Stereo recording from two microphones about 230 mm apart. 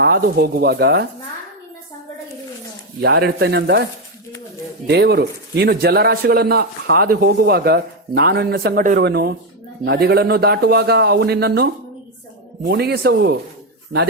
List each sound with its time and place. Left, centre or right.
0.0 s a man's voice: right
3.0 s a man's voice: right
4.9 s a man's voice: right